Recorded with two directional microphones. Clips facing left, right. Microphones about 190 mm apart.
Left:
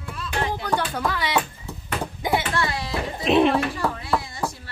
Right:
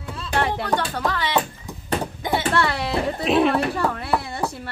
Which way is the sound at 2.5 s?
65° right (ahead or behind).